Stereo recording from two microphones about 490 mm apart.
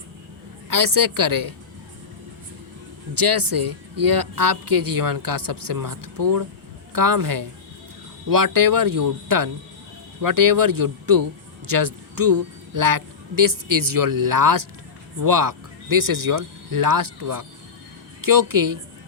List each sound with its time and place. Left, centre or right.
0.7 s speech: right
3.2 s a woman's voice: right